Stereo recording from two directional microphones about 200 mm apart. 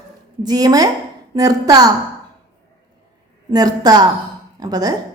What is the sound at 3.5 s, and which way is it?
A woman's voice, 20° right (ahead or behind).